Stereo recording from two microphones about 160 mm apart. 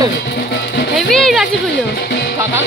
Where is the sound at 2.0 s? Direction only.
90° left.